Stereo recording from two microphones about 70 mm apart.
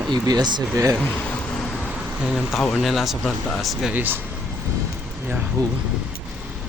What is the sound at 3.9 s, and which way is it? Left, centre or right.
Speech, right.